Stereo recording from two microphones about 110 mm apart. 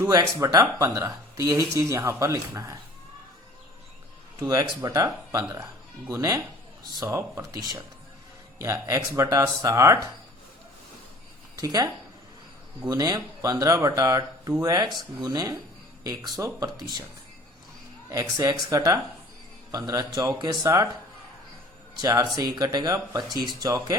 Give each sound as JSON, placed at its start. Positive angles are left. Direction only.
{"t": 0.1, "sound": "speech", "side_deg": -30}
{"t": 4.4, "sound": "speech", "side_deg": -30}
{"t": 8.6, "sound": "speech", "side_deg": -25}
{"t": 11.5, "sound": "speech", "side_deg": -35}
{"t": 12.9, "sound": "speech", "side_deg": -35}
{"t": 18.1, "sound": "speech", "side_deg": -25}
{"t": 22.0, "sound": "speech", "side_deg": -35}